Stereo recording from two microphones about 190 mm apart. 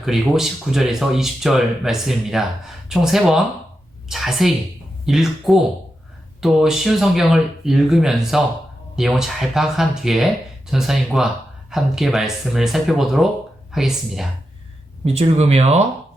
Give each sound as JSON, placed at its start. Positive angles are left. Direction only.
{"t": 0.0, "sound": "speech", "side_deg": 0}
{"t": 15.0, "sound": "speech", "side_deg": -35}